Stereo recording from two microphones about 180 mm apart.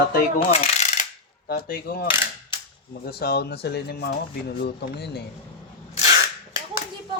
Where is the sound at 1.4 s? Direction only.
55° left (ahead or behind).